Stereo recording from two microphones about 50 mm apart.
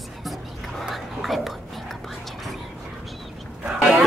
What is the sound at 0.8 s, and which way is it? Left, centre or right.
Whispering, centre.